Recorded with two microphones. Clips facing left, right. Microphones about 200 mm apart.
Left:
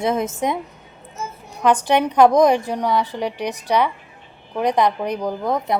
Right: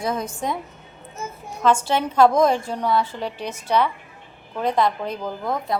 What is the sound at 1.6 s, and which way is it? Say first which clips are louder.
A woman's voice: left 3 dB; 15° left (ahead or behind).